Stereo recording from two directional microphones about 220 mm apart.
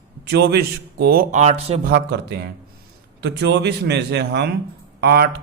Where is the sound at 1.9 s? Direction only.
45° right (ahead or behind).